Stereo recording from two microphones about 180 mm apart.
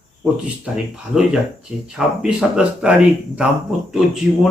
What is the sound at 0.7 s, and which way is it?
Speech, 5° right (ahead or behind).